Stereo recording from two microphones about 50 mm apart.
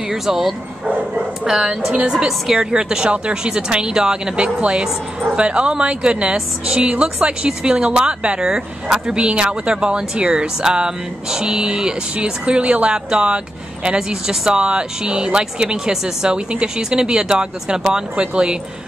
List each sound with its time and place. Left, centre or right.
0.1 s a woman's voice: centre